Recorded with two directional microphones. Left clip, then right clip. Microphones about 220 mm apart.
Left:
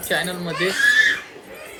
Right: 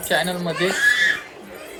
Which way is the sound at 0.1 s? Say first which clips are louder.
Right 2 dB; 15° right (ahead or behind).